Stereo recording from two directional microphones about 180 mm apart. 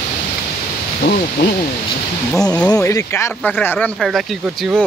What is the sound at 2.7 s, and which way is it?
Speech, 15° left (ahead or behind).